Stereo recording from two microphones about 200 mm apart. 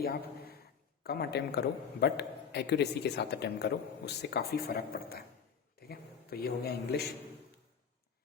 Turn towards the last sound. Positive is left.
turn(degrees=50)  # may be behind; listen again after turning